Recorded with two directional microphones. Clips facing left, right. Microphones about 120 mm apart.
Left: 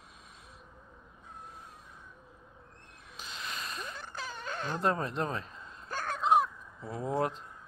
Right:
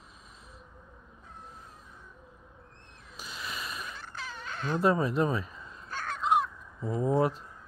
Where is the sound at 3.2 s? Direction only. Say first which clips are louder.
Right 2 dB; 5° right (ahead or behind).